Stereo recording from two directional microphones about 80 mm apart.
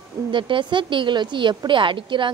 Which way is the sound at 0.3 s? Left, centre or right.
Right.